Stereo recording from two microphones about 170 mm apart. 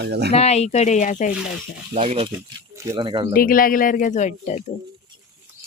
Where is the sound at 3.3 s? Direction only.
60° left (ahead or behind).